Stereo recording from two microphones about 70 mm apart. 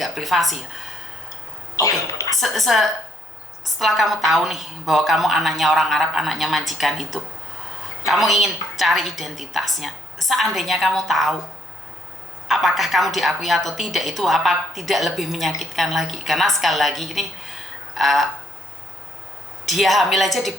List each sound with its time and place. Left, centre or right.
0.0 s a woman's voice: centre
1.7 s cough: left
2.4 s a woman's voice: centre
12.5 s a woman's voice: centre
19.6 s a woman's voice: centre